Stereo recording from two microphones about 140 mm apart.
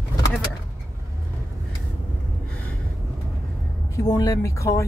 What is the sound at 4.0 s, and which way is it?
Speech, 25° left (ahead or behind).